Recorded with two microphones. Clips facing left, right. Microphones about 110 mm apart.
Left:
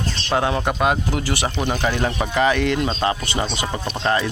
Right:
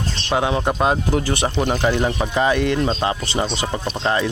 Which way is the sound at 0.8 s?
30° right (ahead or behind).